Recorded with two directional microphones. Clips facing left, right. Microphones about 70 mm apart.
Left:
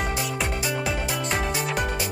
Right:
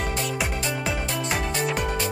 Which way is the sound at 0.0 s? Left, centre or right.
Centre.